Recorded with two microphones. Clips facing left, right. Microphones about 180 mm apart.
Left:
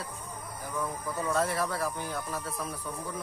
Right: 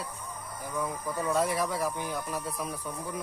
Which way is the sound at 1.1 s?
10° right (ahead or behind).